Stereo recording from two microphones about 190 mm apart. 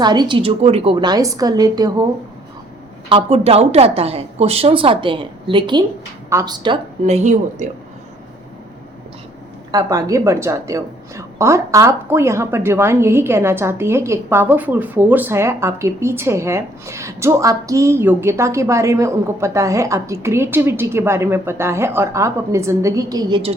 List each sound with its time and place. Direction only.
0.0 s a woman's voice: 20° right (ahead or behind)
3.1 s a woman's voice: 30° right (ahead or behind)
9.7 s a woman's voice: 15° right (ahead or behind)